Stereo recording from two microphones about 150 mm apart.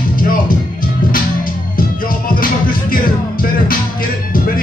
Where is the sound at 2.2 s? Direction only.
75° left (ahead or behind).